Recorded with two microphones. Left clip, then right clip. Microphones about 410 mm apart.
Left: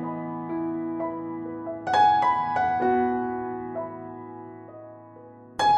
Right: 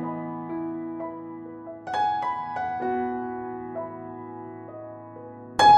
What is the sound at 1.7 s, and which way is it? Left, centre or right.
Music, left.